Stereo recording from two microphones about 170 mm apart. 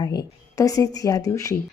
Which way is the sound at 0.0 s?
20° left (ahead or behind).